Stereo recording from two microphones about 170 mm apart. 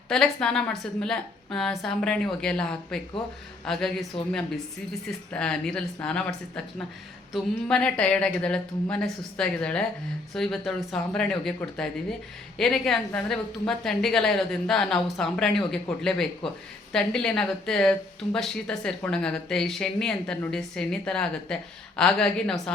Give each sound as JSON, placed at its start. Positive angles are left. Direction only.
{"t": 0.1, "sound": "speech", "side_deg": 5}
{"t": 4.1, "sound": "a woman's voice", "side_deg": 30}
{"t": 5.3, "sound": "speech", "side_deg": 5}
{"t": 7.3, "sound": "speech", "side_deg": 5}